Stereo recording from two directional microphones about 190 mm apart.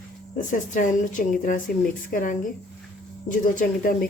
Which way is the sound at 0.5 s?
45° left (ahead or behind).